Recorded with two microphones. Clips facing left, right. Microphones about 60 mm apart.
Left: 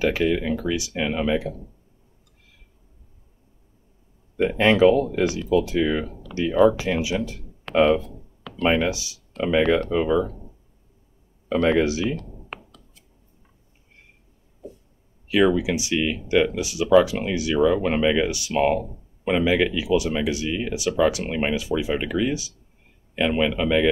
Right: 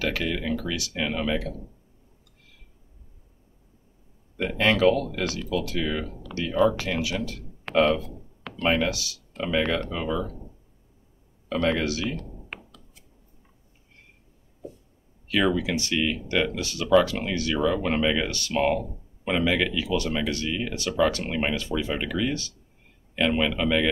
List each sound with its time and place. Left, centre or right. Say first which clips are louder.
0.0 s speech: left 6 dB; left
4.4 s speech: left 5 dB; left
9.4 s speech: left 6 dB; centre
11.4 s speech: left 5 dB; centre
12.3 s computer keyboard: left 2 dB; centre
15.2 s speech: left 4 dB; centre